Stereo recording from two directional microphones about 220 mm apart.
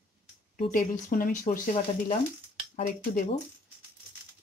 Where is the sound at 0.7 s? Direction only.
40° left (ahead or behind).